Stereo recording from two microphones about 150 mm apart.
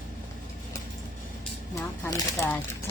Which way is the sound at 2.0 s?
15° left (ahead or behind).